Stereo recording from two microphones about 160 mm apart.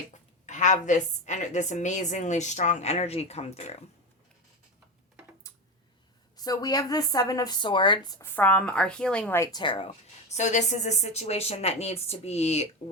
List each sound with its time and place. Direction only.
0.1 s a woman's voice: 50° left (ahead or behind)
6.3 s a woman's voice: 25° left (ahead or behind)
8.4 s a woman's voice: 10° left (ahead or behind)
9.4 s a woman's voice: 25° left (ahead or behind); by 12.6 s 40° left (ahead or behind)